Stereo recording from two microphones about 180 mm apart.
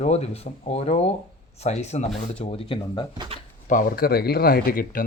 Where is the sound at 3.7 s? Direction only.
50° left (ahead or behind).